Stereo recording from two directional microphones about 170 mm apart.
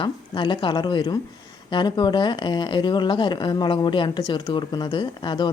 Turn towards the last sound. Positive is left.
turn(degrees=25)  # may be behind; listen again after turning